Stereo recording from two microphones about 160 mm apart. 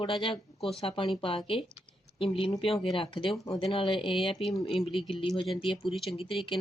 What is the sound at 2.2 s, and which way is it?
Speech, 35° left (ahead or behind).